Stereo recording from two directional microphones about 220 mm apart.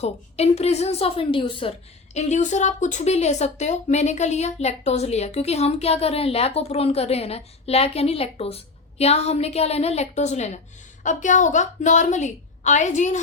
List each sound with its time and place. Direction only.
0.0 s a woman's voice: 30° left (ahead or behind)